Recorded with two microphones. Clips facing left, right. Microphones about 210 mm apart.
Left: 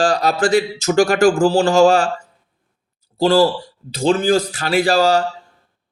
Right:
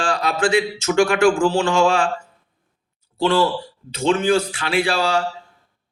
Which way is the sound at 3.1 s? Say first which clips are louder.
Left 4 dB; 35° left (ahead or behind).